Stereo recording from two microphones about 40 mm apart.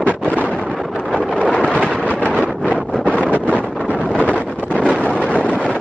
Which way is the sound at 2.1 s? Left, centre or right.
Left.